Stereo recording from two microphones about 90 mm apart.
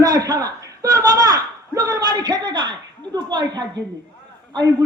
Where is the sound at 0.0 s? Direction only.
45° right (ahead or behind).